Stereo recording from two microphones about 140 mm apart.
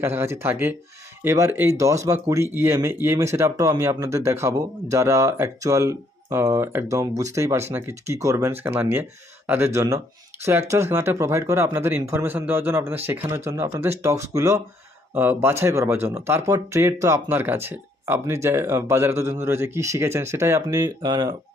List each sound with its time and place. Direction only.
0.0 s speech: 15° right (ahead or behind)